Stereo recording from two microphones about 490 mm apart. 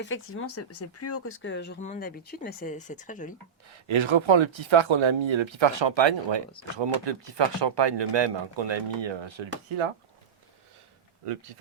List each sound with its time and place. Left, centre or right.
0.0 s speech: left
3.7 s speech: right